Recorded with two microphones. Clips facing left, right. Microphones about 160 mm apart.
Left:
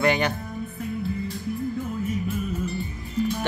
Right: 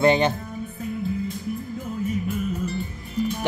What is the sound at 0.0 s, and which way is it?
Music, 30° right (ahead or behind).